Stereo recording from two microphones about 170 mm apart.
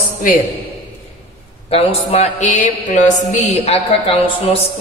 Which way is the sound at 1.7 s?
35° left (ahead or behind).